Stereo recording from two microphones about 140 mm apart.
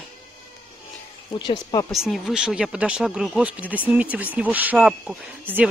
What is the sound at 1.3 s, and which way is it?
Speech, 35° left (ahead or behind).